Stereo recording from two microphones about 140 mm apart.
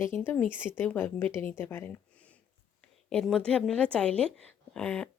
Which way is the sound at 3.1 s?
5° left (ahead or behind).